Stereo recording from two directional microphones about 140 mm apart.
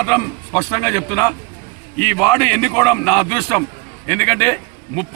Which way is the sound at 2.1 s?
20° left (ahead or behind).